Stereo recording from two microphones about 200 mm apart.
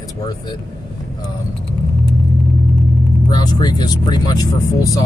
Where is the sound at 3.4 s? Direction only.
20° left (ahead or behind).